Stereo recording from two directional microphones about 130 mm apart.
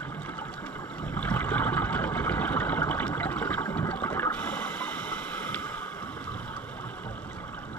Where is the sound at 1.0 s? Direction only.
10° left (ahead or behind).